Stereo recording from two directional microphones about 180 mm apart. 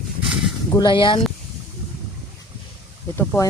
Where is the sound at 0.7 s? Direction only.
25° left (ahead or behind).